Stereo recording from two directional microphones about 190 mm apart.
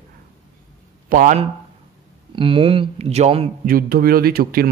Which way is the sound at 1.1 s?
45° right (ahead or behind).